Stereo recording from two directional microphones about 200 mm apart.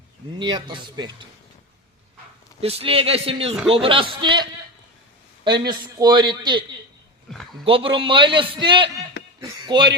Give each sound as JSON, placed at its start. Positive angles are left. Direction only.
{"t": 0.3, "sound": "a man's voice", "side_deg": -25}
{"t": 2.6, "sound": "a man's voice", "side_deg": -30}
{"t": 5.5, "sound": "a man's voice", "side_deg": -20}